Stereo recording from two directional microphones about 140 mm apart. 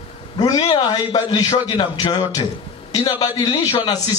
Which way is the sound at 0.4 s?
25° left (ahead or behind).